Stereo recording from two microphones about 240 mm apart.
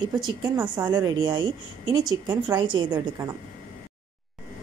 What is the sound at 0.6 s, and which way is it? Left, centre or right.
A woman's voice, centre.